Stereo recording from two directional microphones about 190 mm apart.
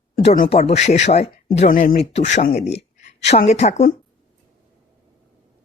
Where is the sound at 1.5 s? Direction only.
45° left (ahead or behind).